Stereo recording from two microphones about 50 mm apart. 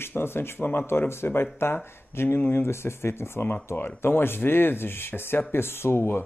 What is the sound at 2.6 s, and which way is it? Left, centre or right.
Speech, left.